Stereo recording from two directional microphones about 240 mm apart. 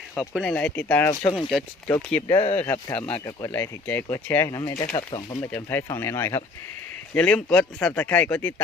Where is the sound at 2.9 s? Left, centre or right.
Left.